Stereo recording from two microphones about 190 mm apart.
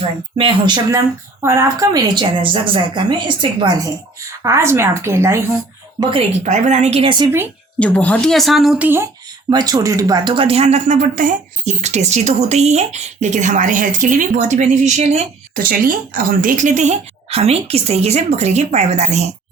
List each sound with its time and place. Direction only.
0.3 s speech: 25° right (ahead or behind)
6.0 s speech: 30° right (ahead or behind)
7.8 s speech: 5° left (ahead or behind); by 9.0 s 10° right (ahead or behind)
9.5 s speech: 20° right (ahead or behind); by 19.3 s 35° right (ahead or behind)